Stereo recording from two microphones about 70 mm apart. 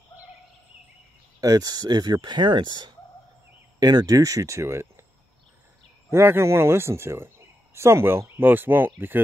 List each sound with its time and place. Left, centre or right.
1.4 s speech: right
2.2 s speech: right
3.8 s speech: right
6.0 s speech: right